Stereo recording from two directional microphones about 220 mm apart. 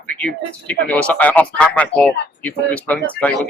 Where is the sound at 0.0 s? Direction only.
5° left (ahead or behind).